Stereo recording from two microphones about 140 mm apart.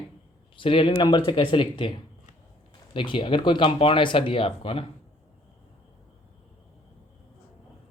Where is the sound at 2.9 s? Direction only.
35° left (ahead or behind).